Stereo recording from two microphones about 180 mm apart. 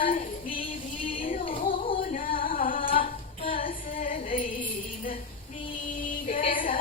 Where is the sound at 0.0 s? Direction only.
50° left (ahead or behind).